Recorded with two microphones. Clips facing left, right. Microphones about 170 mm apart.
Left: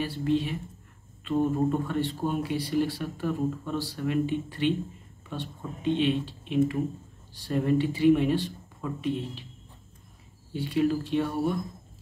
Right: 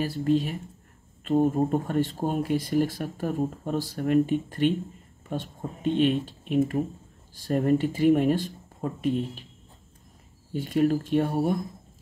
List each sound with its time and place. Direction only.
0.0 s speech: 40° right (ahead or behind)
10.5 s speech: 45° right (ahead or behind)